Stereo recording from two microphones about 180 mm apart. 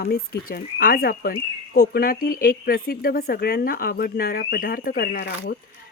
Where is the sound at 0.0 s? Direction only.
55° left (ahead or behind).